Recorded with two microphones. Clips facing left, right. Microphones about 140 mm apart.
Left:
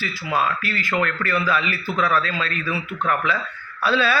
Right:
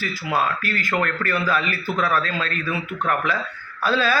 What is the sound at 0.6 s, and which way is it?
A man's voice, 45° right (ahead or behind).